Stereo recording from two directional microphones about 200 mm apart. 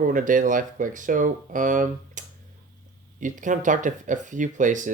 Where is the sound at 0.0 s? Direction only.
40° right (ahead or behind).